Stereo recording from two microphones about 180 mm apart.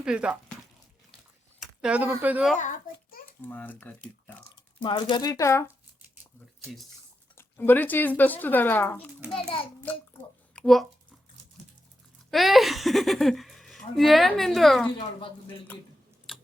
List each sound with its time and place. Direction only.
0.0 s speech: 5° right (ahead or behind)
1.5 s speech: 5° right (ahead or behind)
2.6 s a child's voice: 45° left (ahead or behind)
3.5 s speech: 10° left (ahead or behind)
4.8 s speech: 25° left (ahead or behind)
7.3 s speech: 10° left (ahead or behind)
10.5 s a sound: centre (ahead or behind)
12.3 s speech: centre (ahead or behind)
16.3 s typing: centre (ahead or behind)